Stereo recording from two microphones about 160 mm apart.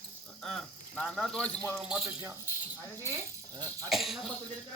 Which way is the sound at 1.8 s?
10° right (ahead or behind).